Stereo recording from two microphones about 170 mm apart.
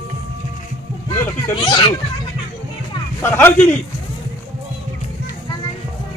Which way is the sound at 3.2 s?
10° left (ahead or behind).